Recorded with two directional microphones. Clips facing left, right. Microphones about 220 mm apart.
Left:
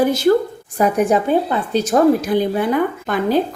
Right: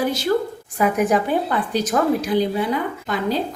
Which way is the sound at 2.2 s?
55° left (ahead or behind).